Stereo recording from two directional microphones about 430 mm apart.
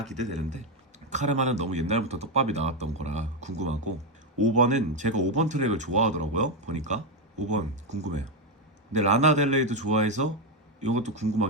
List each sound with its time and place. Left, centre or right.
0.2 s speech: centre